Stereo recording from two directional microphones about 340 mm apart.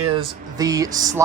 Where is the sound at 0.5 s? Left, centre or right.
Centre.